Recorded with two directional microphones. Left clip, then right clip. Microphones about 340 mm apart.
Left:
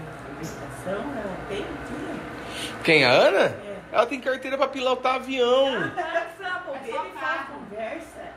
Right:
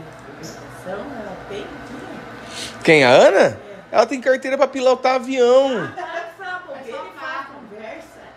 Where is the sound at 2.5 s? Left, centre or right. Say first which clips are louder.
Right 6 dB; right.